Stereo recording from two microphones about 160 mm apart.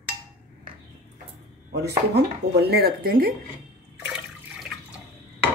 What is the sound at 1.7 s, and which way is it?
Speech, 90° right.